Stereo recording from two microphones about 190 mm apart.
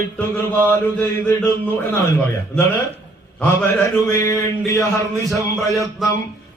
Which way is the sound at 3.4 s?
10° left (ahead or behind).